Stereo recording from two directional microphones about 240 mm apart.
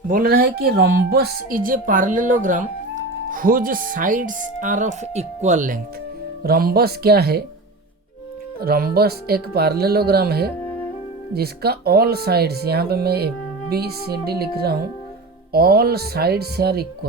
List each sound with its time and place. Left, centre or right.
0.1 s speech: right
8.6 s speech: right